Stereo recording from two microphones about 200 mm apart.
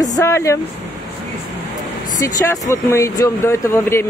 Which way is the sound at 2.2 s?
15° left (ahead or behind).